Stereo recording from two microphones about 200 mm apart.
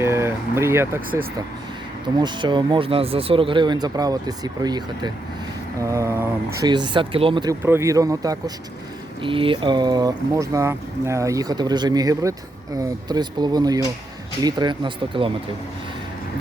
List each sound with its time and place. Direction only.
0.0 s vehicle: 15° right (ahead or behind)
2.1 s speech: 20° right (ahead or behind)
7.6 s speech: 15° right (ahead or behind)